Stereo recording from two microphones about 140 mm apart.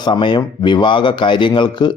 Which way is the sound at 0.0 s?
35° left (ahead or behind).